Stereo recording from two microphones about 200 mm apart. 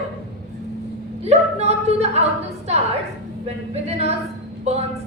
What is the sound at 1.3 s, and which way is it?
Speech, 30° right (ahead or behind).